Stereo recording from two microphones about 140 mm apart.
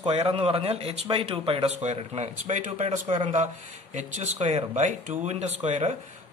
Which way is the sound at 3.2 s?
50° right (ahead or behind).